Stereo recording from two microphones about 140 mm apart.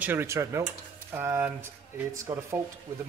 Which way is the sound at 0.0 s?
15° right (ahead or behind).